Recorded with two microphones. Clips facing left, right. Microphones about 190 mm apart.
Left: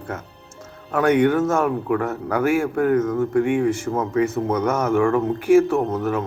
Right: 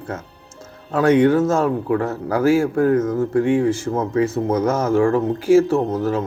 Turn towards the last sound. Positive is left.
turn(degrees=-30)  # may be behind; listen again after turning